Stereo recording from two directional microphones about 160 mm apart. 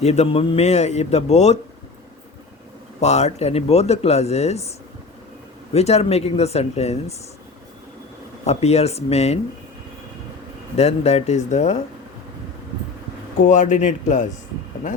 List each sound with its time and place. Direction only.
0.0 s a man's voice: 40° left (ahead or behind)
3.0 s speech: 45° left (ahead or behind)
5.7 s speech: 40° left (ahead or behind)
8.4 s speech: 40° left (ahead or behind)
10.8 s a man's voice: 40° left (ahead or behind)
13.5 s a man's voice: 50° left (ahead or behind)